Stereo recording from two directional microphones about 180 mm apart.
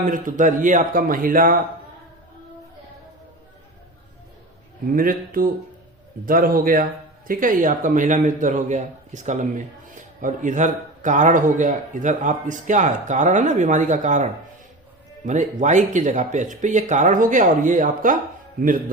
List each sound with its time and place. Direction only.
0.0 s a man's voice: 45° right (ahead or behind)
4.9 s a man's voice: 50° right (ahead or behind)
15.3 s a man's voice: 45° right (ahead or behind)